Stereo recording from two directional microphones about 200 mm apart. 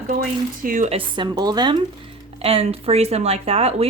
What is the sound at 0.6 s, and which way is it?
Speech, 40° right (ahead or behind).